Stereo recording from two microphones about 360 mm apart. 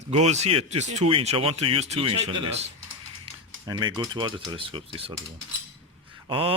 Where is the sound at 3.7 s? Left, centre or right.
Centre.